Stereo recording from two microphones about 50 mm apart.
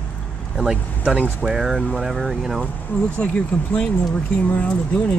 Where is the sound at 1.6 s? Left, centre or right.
Centre.